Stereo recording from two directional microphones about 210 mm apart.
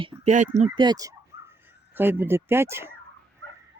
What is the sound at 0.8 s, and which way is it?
Speech, 20° right (ahead or behind).